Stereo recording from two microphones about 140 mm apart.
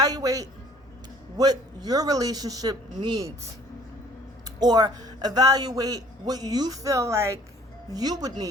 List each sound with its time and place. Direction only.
0.0 s a sound: 25° right (ahead or behind)
1.4 s a man's voice: 25° right (ahead or behind)
4.6 s a man's voice: 30° right (ahead or behind)